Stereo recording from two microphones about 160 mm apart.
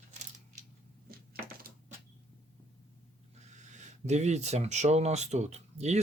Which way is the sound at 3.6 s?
50° right (ahead or behind).